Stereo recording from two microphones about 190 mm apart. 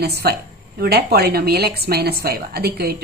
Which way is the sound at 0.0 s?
55° right (ahead or behind).